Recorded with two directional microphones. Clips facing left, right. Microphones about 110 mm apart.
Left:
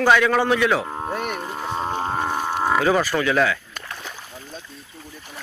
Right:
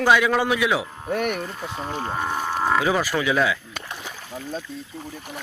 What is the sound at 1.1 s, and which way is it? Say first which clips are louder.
Speech: right 5 dB; 65° right (ahead or behind).